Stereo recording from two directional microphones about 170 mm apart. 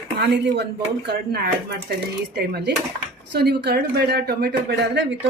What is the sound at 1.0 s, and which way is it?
Speech, 70° right (ahead or behind).